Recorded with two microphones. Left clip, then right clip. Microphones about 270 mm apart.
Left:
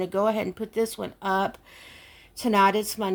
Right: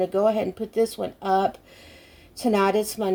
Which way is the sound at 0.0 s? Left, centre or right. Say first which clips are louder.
Right 3 dB; left.